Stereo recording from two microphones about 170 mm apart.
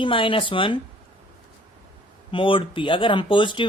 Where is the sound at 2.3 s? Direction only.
30° left (ahead or behind).